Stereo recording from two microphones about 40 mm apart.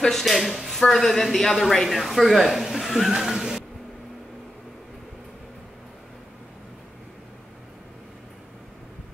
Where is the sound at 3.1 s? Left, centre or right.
Centre.